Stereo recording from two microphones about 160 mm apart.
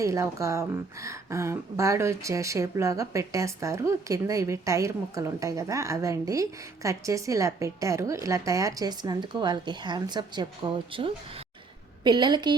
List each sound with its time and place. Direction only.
0.0 s a woman's voice: 20° right (ahead or behind)